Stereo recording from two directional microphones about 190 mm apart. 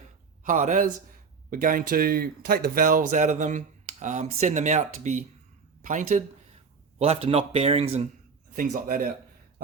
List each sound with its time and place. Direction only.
0.4 s speech: 45° right (ahead or behind)
8.5 s speech: 45° right (ahead or behind)